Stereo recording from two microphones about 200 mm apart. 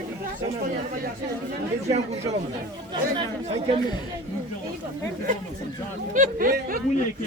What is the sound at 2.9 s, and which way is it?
Speech, 25° right (ahead or behind).